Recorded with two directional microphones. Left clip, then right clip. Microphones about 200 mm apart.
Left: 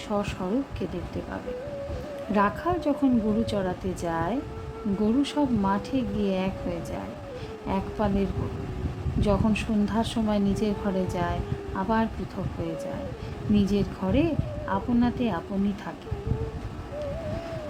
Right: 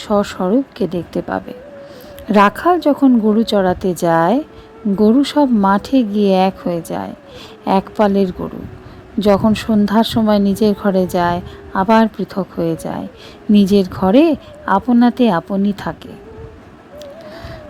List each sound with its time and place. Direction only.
0.1 s a woman's voice: 45° right (ahead or behind)